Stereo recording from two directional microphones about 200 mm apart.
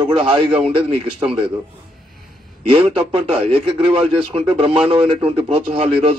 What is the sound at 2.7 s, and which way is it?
A man's voice, 30° right (ahead or behind).